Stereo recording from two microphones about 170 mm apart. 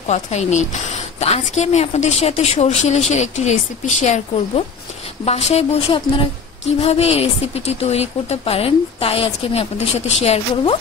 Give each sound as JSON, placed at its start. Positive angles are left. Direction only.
{"t": 0.1, "sound": "a woman's voice", "side_deg": 40}